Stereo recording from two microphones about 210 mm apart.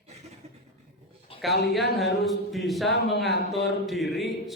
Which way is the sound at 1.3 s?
25° left (ahead or behind).